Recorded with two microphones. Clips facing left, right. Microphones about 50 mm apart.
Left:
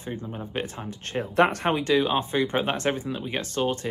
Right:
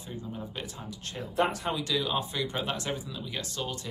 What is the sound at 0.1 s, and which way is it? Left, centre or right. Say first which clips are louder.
Speech: left 6 dB; left.